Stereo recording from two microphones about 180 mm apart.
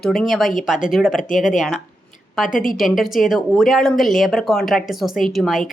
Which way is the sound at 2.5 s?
50° left (ahead or behind).